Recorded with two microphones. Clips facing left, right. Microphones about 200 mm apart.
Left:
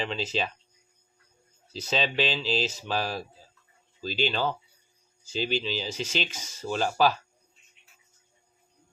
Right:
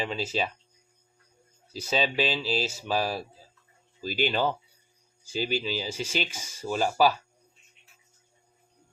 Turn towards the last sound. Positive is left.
turn(degrees=-10)  # may be behind; listen again after turning